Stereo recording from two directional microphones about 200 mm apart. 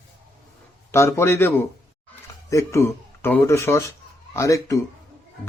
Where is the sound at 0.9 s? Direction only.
15° left (ahead or behind).